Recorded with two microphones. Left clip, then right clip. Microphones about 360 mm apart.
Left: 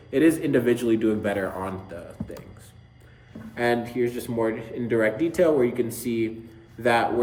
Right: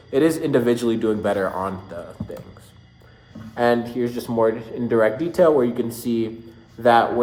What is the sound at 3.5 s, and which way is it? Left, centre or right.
Speech, centre.